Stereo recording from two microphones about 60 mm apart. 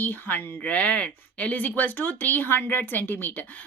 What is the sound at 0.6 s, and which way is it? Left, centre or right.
A woman's voice, left.